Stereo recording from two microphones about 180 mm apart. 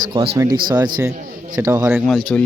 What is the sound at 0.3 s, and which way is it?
Speech, 20° right (ahead or behind).